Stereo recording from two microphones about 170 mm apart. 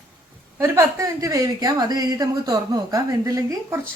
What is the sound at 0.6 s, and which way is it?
A woman's voice, 20° right (ahead or behind).